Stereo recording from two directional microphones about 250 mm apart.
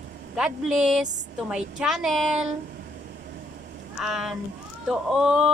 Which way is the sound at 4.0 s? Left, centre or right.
Centre.